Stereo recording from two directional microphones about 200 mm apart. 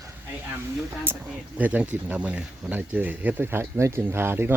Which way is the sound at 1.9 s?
5° right (ahead or behind).